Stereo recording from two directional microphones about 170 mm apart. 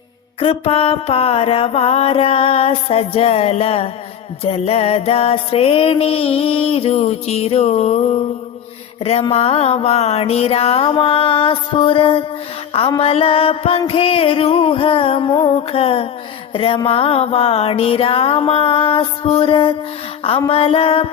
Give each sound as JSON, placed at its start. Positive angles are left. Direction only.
{"t": 0.3, "sound": "music", "side_deg": 35}